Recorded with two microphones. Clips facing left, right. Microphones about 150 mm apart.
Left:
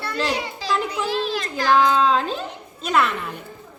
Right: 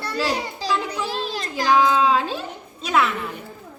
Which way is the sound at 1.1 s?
40° right (ahead or behind).